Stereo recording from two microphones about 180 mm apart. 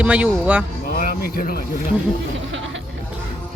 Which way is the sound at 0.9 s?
50° left (ahead or behind).